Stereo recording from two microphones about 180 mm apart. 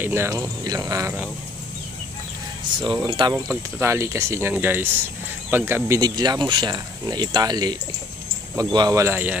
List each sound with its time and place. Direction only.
0.0 s speech: 15° right (ahead or behind)
2.8 s speech: 25° right (ahead or behind)
3.8 s speech: 15° right (ahead or behind)